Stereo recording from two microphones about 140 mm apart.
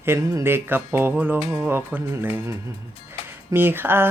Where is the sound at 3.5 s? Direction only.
15° right (ahead or behind).